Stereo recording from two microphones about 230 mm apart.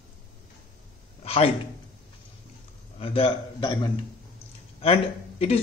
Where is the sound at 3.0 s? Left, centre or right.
Left.